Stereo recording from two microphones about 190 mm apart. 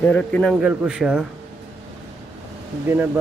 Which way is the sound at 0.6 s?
5° right (ahead or behind).